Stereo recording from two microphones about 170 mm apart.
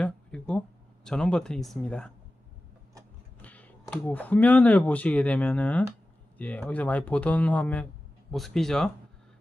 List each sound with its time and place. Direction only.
0.0 s speech: 5° left (ahead or behind)
3.4 s speech: 10° left (ahead or behind)